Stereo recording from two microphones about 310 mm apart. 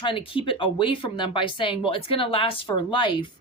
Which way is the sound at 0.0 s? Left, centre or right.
Centre.